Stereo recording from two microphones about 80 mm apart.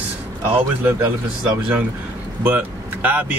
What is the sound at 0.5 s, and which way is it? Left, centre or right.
Speech, right.